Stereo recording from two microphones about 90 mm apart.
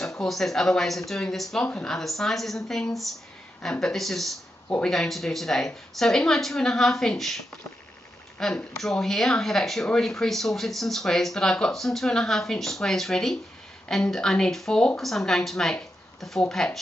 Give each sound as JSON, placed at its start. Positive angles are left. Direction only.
{"t": 0.2, "sound": "speech", "side_deg": 5}
{"t": 1.7, "sound": "speech", "side_deg": 15}
{"t": 2.0, "sound": "speech", "side_deg": 5}
{"t": 4.6, "sound": "speech", "side_deg": 15}
{"t": 4.9, "sound": "speech", "side_deg": 5}